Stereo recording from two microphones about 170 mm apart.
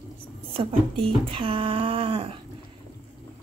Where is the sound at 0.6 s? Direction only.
30° right (ahead or behind).